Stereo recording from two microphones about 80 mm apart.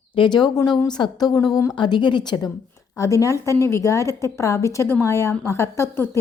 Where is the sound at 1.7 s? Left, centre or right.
Left.